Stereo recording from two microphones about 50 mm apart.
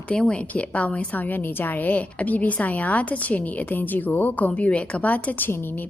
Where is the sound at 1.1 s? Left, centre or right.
Left.